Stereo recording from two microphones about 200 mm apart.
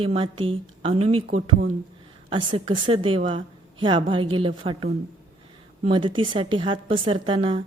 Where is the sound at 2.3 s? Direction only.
25° right (ahead or behind).